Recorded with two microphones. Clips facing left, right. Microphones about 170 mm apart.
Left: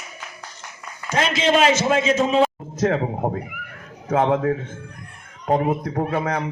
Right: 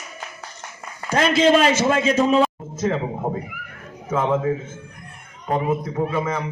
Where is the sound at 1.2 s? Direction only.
35° right (ahead or behind).